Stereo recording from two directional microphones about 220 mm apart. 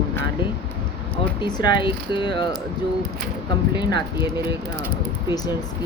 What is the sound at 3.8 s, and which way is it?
Speech, 20° left (ahead or behind).